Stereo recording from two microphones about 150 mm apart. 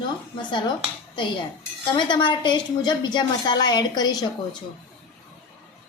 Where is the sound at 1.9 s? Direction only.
30° left (ahead or behind).